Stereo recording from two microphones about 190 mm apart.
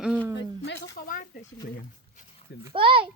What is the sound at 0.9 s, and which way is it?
Speech, 45° left (ahead or behind).